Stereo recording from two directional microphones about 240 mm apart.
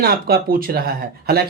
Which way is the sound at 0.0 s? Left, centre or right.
Right.